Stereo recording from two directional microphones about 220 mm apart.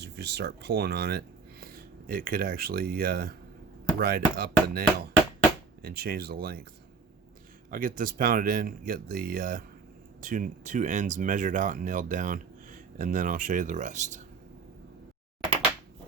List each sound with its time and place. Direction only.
0.0 s speech: 50° right (ahead or behind)
7.7 s speech: 40° right (ahead or behind)